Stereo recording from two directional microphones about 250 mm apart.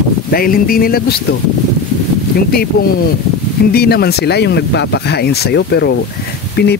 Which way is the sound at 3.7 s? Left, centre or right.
Left.